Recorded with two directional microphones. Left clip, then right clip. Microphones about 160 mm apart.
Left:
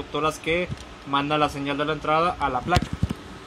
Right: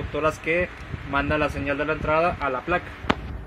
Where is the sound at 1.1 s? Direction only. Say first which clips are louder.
Left 1 dB; 75° left (ahead or behind).